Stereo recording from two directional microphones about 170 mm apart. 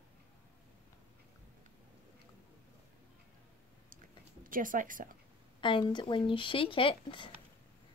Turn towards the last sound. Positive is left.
turn(degrees=30)  # may be behind; listen again after turning